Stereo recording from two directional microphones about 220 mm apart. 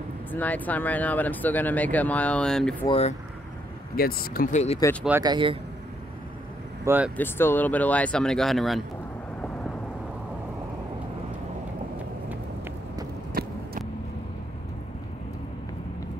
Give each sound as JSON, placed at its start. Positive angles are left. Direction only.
{"t": 0.3, "sound": "speech", "side_deg": 5}
{"t": 2.9, "sound": "speech", "side_deg": 30}
{"t": 3.9, "sound": "speech", "side_deg": 40}
{"t": 5.2, "sound": "speech", "side_deg": -20}
{"t": 6.8, "sound": "speech", "side_deg": -10}
{"t": 7.2, "sound": "speech", "side_deg": 10}
{"t": 13.3, "sound": "a sound", "side_deg": -40}